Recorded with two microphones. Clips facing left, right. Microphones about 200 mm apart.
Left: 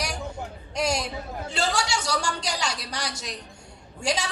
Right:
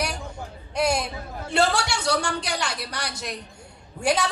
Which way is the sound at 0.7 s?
60° right (ahead or behind).